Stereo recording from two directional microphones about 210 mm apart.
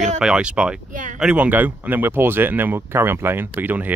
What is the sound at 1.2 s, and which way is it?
Speech, 5° right (ahead or behind).